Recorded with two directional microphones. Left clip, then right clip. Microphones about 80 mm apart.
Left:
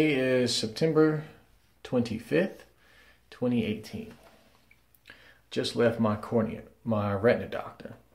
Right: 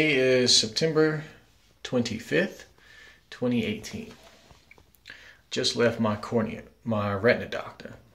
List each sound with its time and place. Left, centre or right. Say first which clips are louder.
0.0 s speech: right 3 dB; left
5.1 s a sound: right 6 dB; left
5.5 s speech: right 2 dB; left